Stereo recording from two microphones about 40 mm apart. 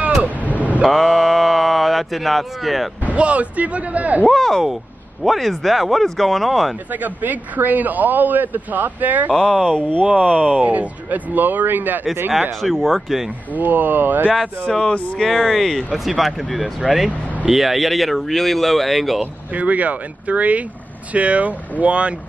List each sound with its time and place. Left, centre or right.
0.6 s vehicle: right
0.8 s a sound: centre
3.1 s speech: right
4.3 s speech: centre
6.9 s speech: right
9.3 s speech: centre
10.2 s speech: left
10.5 s speech: right
12.6 s speech: centre
13.6 s speech: right
14.7 s speech: centre
15.2 s speech: centre
19.5 s speech: right